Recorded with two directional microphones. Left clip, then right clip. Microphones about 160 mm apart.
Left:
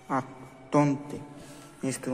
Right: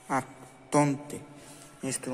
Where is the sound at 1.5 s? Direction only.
10° right (ahead or behind).